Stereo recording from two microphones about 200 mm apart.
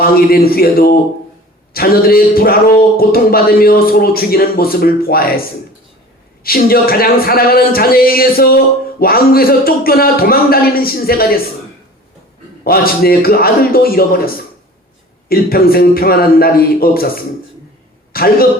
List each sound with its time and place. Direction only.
0.3 s speech: 50° left (ahead or behind)
6.4 s speech: 50° left (ahead or behind)
12.6 s speech: 50° left (ahead or behind)
15.3 s a man's voice: 50° left (ahead or behind)